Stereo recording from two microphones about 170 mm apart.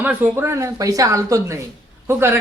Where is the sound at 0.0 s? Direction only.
10° right (ahead or behind).